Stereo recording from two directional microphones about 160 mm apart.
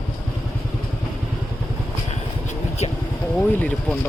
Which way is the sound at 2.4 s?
40° left (ahead or behind).